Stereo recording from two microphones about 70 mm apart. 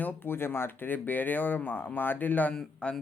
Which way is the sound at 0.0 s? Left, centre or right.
Left.